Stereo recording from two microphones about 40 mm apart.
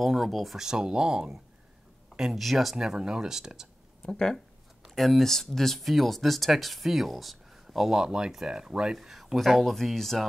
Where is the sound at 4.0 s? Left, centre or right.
Centre.